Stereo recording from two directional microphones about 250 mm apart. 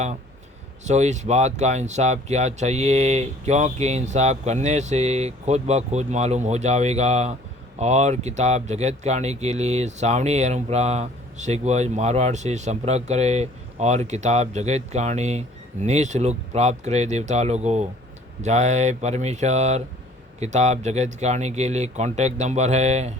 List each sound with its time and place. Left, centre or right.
0.9 s speech: right